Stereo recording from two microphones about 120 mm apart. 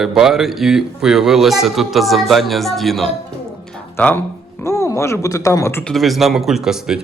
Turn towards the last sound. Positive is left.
turn(degrees=-5)  # may be behind; listen again after turning